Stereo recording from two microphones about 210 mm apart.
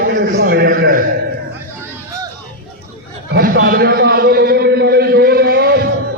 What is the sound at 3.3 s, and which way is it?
A man's voice, 50° right (ahead or behind).